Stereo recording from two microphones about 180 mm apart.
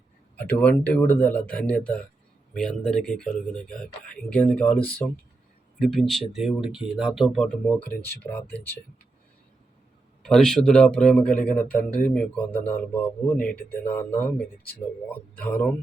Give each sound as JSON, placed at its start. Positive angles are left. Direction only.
{"t": 0.3, "sound": "speech", "side_deg": 10}
{"t": 10.2, "sound": "speech", "side_deg": 0}